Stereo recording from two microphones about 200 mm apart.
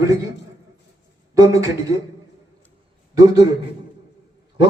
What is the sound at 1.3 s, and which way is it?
Speech, 15° right (ahead or behind).